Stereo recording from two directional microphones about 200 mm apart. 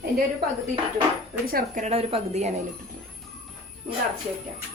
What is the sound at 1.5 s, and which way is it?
Speech, 40° right (ahead or behind).